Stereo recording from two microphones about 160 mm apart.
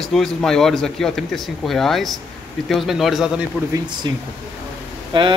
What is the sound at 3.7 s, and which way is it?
Speech, 25° right (ahead or behind).